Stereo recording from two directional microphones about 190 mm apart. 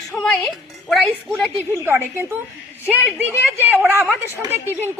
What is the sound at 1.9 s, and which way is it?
Speech, 10° right (ahead or behind).